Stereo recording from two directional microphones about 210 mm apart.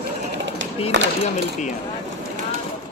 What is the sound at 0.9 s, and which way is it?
Speech, 60° right (ahead or behind).